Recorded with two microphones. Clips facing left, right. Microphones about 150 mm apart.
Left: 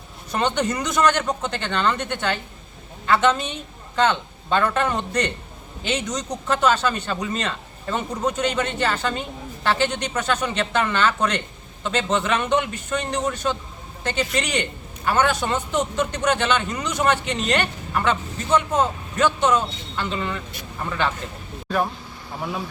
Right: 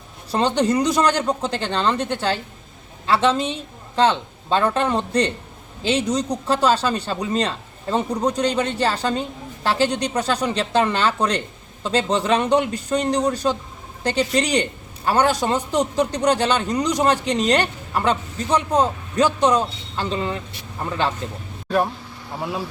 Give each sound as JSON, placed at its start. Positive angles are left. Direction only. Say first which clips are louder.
{"t": 0.3, "sound": "a man's voice", "louder": "right 4 dB", "side_deg": -30}